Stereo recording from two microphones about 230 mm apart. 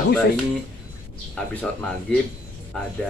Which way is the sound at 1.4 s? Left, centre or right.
Centre.